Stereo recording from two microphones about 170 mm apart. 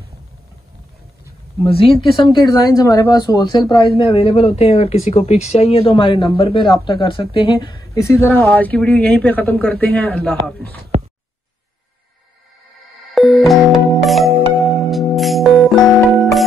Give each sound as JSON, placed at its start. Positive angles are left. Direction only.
{"t": 1.6, "sound": "speech", "side_deg": 35}
{"t": 2.2, "sound": "speech", "side_deg": 25}
{"t": 13.1, "sound": "music", "side_deg": 0}